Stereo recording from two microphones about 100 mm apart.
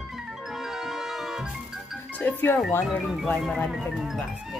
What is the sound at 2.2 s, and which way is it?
Speech, 20° left (ahead or behind).